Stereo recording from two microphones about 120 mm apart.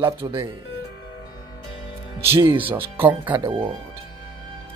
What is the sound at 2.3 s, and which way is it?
Speech, 50° right (ahead or behind).